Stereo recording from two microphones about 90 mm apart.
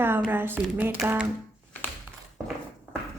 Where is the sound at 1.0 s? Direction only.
5° right (ahead or behind).